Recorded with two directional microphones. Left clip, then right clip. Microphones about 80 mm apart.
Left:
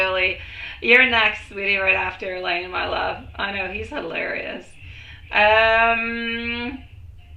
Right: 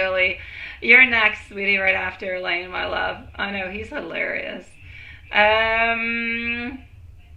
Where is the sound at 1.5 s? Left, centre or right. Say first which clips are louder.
Even; right.